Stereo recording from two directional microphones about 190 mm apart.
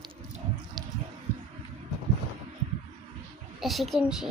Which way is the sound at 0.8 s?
20° right (ahead or behind).